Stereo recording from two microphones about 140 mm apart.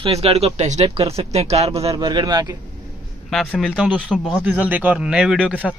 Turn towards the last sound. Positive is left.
turn(degrees=-5)  # may be behind; listen again after turning